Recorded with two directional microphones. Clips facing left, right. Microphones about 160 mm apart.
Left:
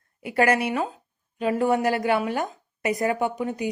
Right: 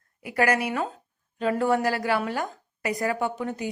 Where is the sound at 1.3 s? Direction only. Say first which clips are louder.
Left 1 dB; 15° left (ahead or behind).